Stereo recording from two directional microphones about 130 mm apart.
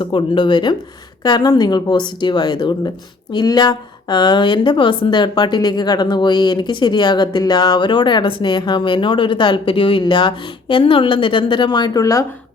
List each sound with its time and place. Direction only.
0.0 s a woman's voice: 40° left (ahead or behind)